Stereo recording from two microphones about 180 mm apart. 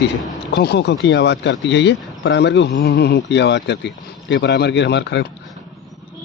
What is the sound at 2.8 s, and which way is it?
Speech, 60° left (ahead or behind).